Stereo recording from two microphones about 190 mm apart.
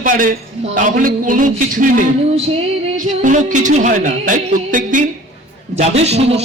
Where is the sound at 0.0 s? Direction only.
45° right (ahead or behind).